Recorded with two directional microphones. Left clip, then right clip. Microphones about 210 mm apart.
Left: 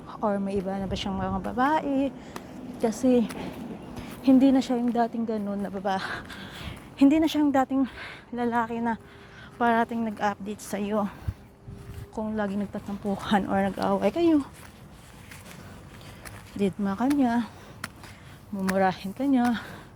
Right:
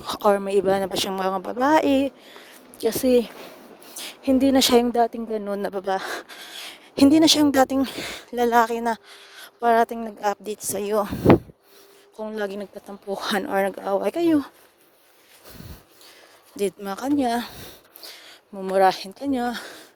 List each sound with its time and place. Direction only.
0.1 s a woman's voice: 60° right (ahead or behind); by 2.1 s 80° right
3.0 s speech: 60° right (ahead or behind)
4.0 s speech: 45° right (ahead or behind); by 10.9 s 70° right (ahead or behind)
10.9 s speech: 55° right (ahead or behind)
12.2 s speech: 60° right (ahead or behind)
16.6 s speech: 55° right (ahead or behind)
18.8 s speech: 70° right (ahead or behind)